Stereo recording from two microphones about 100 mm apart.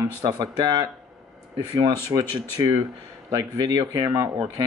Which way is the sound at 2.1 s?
35° right (ahead or behind).